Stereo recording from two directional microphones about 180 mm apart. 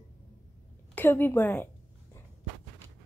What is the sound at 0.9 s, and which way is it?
Speech, 10° left (ahead or behind).